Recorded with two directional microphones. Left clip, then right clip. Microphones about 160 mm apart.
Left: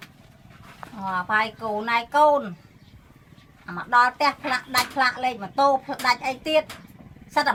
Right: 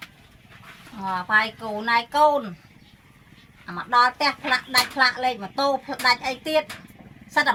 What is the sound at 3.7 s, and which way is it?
Speech, 10° left (ahead or behind).